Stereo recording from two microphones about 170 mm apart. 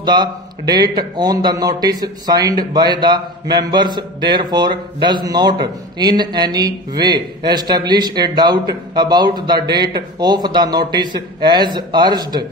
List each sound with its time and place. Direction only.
0.0 s a man's voice: 25° right (ahead or behind)